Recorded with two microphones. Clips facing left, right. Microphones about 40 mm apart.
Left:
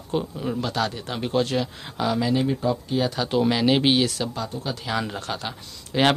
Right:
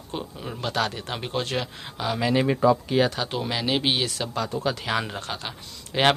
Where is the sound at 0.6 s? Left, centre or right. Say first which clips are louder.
Right 2 dB; right.